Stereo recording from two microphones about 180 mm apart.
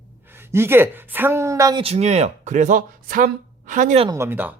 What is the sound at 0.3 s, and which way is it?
Speech, 15° right (ahead or behind).